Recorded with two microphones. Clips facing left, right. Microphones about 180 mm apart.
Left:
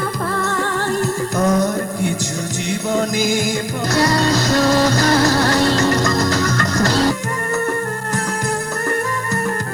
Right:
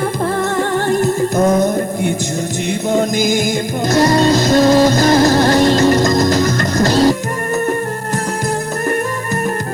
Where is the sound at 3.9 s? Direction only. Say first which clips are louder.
Right 5 dB; 20° right (ahead or behind).